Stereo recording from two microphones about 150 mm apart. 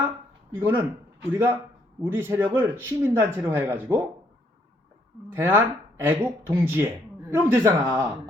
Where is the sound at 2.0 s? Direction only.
15° right (ahead or behind).